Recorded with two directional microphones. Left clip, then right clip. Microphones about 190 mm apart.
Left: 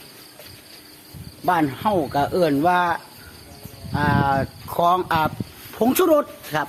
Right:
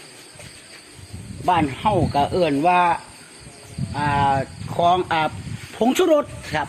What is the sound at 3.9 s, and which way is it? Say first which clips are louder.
Speech: right 1 dB; 20° left (ahead or behind).